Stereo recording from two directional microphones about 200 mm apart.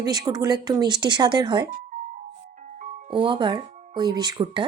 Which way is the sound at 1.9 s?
40° right (ahead or behind).